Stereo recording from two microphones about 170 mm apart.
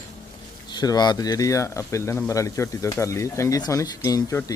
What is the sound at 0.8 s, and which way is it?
Speech, 25° left (ahead or behind).